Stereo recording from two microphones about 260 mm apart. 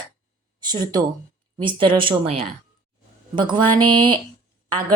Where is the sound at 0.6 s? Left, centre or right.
Centre.